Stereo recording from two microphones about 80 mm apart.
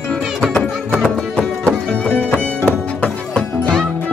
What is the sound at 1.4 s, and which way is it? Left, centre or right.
Music, centre.